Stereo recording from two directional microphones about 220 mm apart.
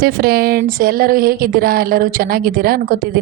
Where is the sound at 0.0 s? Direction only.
45° right (ahead or behind).